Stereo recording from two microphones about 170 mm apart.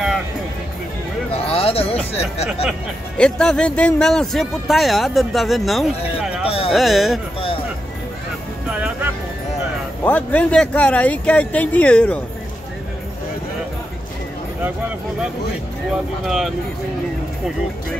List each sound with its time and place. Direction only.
1.3 s a sound: 35° left (ahead or behind)
3.2 s speech: 5° left (ahead or behind)
8.6 s music: 10° right (ahead or behind)
10.0 s speech: 10° left (ahead or behind)
15.9 s speech: centre (ahead or behind)